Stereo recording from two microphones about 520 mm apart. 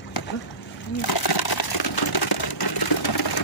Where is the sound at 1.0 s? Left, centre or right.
Left.